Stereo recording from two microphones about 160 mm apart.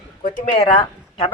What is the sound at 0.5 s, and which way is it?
Speech, 35° left (ahead or behind).